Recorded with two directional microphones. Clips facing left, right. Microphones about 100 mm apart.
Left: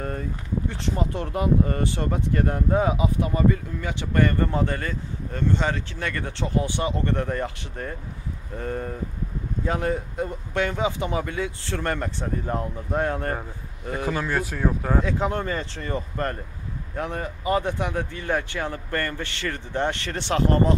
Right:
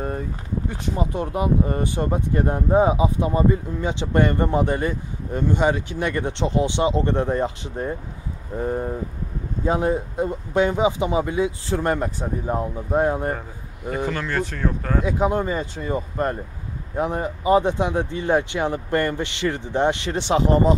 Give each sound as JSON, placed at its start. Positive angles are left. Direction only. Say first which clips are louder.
{"t": 0.7, "sound": "speech", "louder": "right 3 dB", "side_deg": -15}
{"t": 14.0, "sound": "speech", "louder": "left 1 dB", "side_deg": 10}
{"t": 15.0, "sound": "speech", "louder": "right 4 dB", "side_deg": -15}